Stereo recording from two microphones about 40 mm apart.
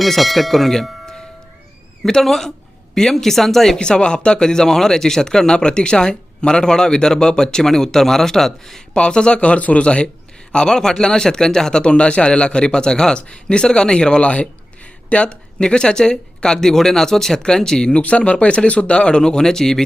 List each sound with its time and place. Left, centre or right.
0.0 s speech: centre
3.8 s speech: left
8.9 s a man's voice: left
9.8 s a man's voice: left
18.0 s a man's voice: left; by 19.8 s centre